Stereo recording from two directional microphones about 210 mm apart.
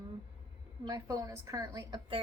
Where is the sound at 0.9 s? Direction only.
15° right (ahead or behind).